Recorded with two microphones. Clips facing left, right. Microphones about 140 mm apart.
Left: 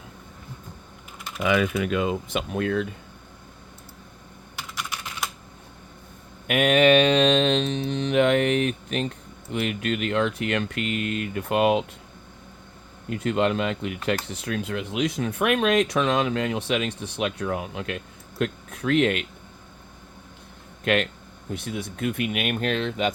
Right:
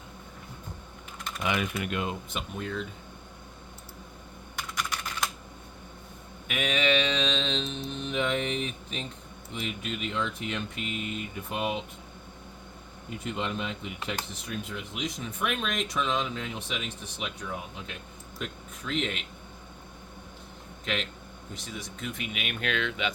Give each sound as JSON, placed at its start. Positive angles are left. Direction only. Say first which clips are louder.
{"t": 2.3, "sound": "speech", "louder": "left 9 dB", "side_deg": 80}
{"t": 4.5, "sound": "typing", "louder": "even", "side_deg": 5}
{"t": 6.5, "sound": "speech", "louder": "left 10 dB", "side_deg": 55}
{"t": 13.1, "sound": "speech", "louder": "left 10 dB", "side_deg": 90}
{"t": 20.8, "sound": "speech", "louder": "left 10 dB", "side_deg": 60}